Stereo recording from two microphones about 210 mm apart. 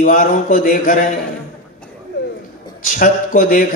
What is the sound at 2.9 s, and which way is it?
Mantra, 40° left (ahead or behind).